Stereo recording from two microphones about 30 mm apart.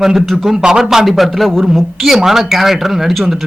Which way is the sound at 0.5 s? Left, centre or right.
Right.